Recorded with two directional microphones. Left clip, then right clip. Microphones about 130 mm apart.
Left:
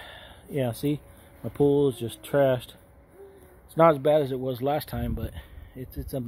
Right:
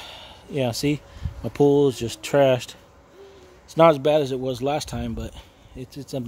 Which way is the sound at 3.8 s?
30° right (ahead or behind).